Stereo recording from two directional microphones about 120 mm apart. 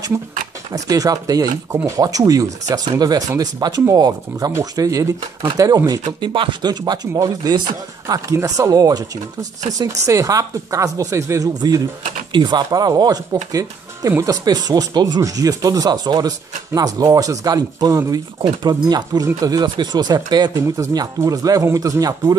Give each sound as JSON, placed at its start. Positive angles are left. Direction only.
{"t": 0.7, "sound": "speech", "side_deg": -30}